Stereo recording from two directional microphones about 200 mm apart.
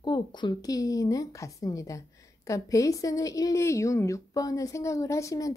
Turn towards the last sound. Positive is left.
turn(degrees=15)  # may be behind; listen again after turning